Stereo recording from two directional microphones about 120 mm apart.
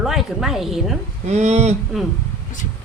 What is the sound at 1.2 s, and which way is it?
Speech, 70° right (ahead or behind).